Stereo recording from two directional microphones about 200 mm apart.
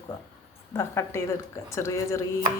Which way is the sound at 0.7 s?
15° left (ahead or behind).